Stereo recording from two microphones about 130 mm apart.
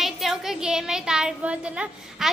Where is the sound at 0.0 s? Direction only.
Centre (ahead or behind).